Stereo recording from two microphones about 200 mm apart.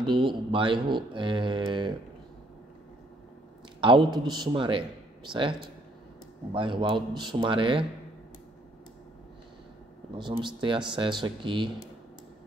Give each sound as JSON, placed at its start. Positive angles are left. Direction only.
{"t": 0.1, "sound": "speech", "side_deg": -25}
{"t": 3.8, "sound": "speech", "side_deg": -25}
{"t": 6.5, "sound": "speech", "side_deg": -25}
{"t": 10.1, "sound": "speech", "side_deg": -25}